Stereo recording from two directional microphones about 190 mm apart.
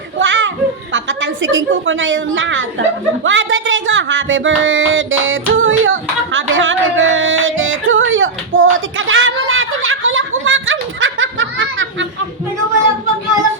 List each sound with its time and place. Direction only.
0.2 s children playing: 80° right
0.9 s a woman's voice: 75° right (ahead or behind)
3.2 s a sound: 85° right